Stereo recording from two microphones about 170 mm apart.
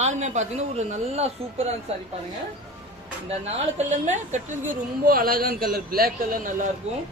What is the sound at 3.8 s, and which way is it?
A woman's voice, 45° right (ahead or behind).